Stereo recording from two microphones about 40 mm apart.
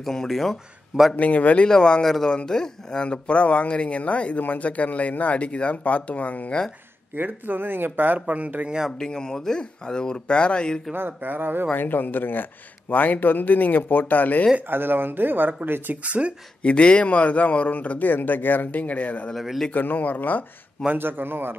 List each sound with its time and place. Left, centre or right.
0.0 s speech: centre
1.1 s speech: left
1.7 s speech: left
7.2 s speech: right
7.9 s speech: right
8.9 s speech: centre
11.0 s speech: right
11.7 s speech: left
14.7 s speech: right
16.0 s speech: right
16.6 s speech: left
20.9 s speech: right